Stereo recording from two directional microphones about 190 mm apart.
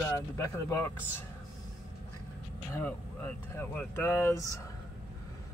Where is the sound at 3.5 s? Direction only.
10° left (ahead or behind).